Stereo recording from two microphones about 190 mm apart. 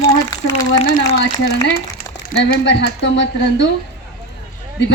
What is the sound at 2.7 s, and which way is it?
Speech, 70° left (ahead or behind).